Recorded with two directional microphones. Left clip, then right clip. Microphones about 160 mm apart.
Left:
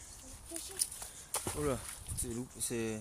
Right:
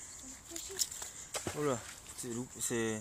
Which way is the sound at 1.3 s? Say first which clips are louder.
Right 1 dB; 20° left (ahead or behind).